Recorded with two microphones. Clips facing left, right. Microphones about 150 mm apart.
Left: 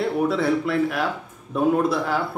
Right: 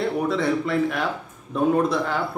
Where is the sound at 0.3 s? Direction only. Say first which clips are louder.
Left 1 dB; 5° left (ahead or behind).